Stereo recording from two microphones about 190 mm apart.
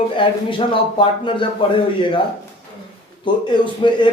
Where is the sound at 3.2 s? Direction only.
25° left (ahead or behind).